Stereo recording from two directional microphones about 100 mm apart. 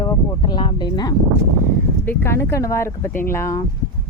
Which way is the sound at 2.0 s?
25° left (ahead or behind).